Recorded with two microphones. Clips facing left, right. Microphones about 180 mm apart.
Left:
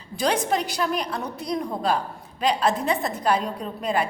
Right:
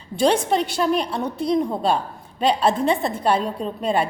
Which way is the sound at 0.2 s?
25° right (ahead or behind).